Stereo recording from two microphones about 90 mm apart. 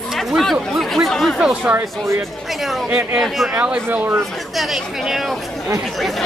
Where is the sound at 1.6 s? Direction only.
30° right (ahead or behind).